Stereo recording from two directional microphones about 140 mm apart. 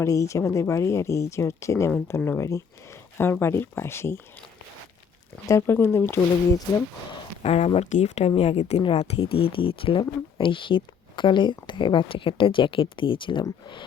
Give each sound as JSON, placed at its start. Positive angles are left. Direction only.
{"t": 0.0, "sound": "speech", "side_deg": 20}
{"t": 5.5, "sound": "speech", "side_deg": 20}
{"t": 7.4, "sound": "speech", "side_deg": 45}